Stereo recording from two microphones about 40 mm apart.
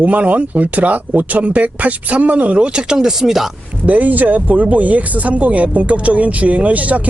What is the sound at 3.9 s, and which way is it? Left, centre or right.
Speech, right.